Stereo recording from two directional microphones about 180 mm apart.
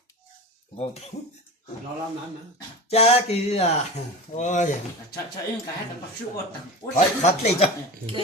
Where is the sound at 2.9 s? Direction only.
35° left (ahead or behind).